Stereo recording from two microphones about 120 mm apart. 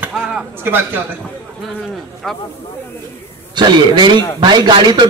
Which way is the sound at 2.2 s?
5° left (ahead or behind).